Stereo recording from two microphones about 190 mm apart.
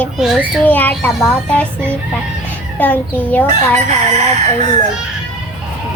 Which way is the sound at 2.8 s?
10° left (ahead or behind).